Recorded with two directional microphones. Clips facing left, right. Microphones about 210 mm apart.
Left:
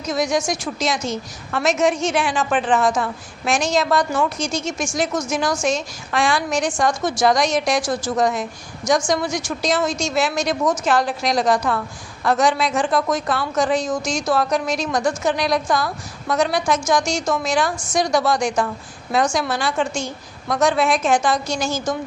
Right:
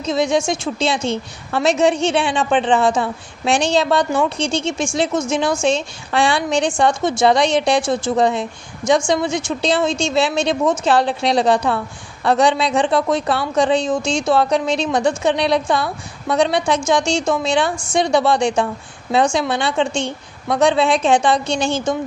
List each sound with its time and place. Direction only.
0.0 s a woman's voice: 30° right (ahead or behind)